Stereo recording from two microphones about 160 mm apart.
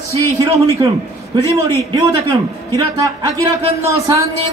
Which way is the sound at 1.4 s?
25° right (ahead or behind).